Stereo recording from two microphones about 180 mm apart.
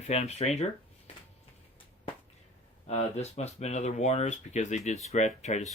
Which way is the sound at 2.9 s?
40° left (ahead or behind).